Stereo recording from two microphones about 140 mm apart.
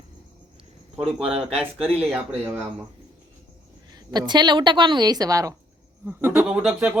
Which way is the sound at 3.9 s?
30° right (ahead or behind).